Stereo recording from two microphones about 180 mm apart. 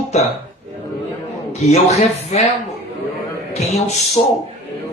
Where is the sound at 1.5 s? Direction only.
40° left (ahead or behind).